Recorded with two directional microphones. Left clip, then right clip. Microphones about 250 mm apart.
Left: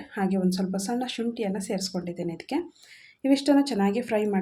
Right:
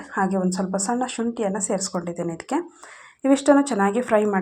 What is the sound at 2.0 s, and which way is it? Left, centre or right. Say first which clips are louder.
Speech: right 5 dB; right.